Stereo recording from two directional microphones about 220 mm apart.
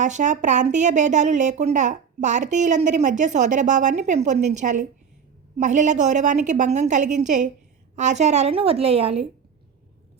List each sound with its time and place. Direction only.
0.0 s a woman's voice: 35° right (ahead or behind)